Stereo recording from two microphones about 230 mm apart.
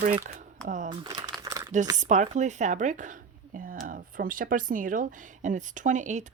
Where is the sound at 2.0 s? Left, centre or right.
Right.